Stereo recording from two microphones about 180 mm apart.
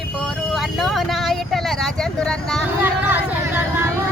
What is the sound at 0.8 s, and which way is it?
Vehicle, centre (ahead or behind).